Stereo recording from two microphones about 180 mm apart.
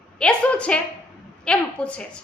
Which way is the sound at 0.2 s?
5° left (ahead or behind).